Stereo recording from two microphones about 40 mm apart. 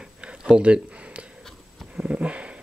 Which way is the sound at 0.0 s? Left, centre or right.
Right.